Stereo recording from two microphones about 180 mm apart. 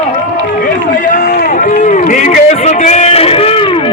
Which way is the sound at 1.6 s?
45° left (ahead or behind).